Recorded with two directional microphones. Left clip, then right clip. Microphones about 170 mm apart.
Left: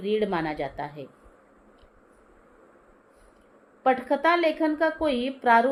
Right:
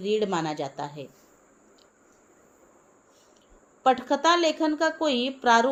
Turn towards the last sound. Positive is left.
turn(degrees=-25)  # may be behind; listen again after turning